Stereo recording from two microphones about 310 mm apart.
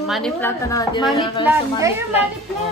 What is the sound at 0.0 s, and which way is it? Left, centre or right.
A woman's voice, centre.